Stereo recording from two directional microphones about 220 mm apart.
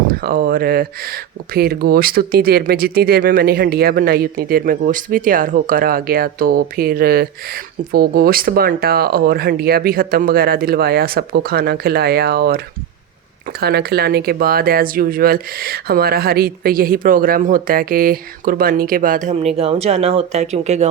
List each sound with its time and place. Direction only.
0.1 s speech: 45° right (ahead or behind)